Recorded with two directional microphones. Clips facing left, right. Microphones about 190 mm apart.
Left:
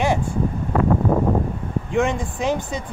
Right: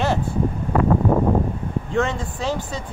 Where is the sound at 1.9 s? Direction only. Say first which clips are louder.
Left 2 dB; 15° left (ahead or behind).